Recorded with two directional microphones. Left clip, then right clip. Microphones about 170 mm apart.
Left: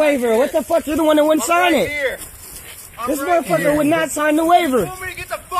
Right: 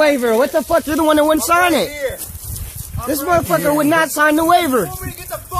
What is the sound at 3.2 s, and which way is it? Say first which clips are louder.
Speech: right 1 dB; 5° right (ahead or behind).